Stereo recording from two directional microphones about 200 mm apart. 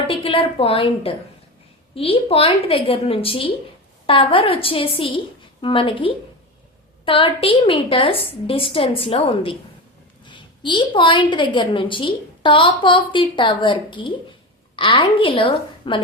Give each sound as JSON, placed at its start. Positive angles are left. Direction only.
{"t": 0.1, "sound": "a woman's voice", "side_deg": 25}